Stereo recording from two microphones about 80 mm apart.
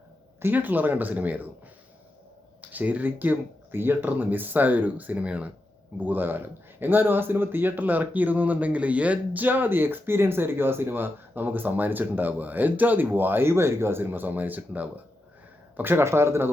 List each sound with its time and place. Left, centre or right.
0.4 s speech: right
2.6 s speech: centre